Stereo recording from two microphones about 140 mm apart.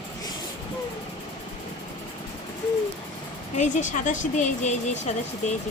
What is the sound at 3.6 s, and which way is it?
Speech, 60° left (ahead or behind).